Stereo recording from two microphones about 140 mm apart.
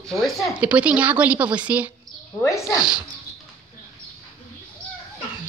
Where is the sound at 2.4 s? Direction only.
20° left (ahead or behind).